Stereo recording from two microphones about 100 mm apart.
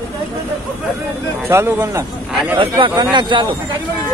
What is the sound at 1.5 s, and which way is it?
Speech, 25° right (ahead or behind).